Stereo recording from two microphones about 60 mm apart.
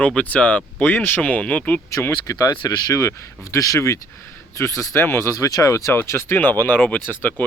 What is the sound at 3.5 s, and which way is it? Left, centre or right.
Speech, left.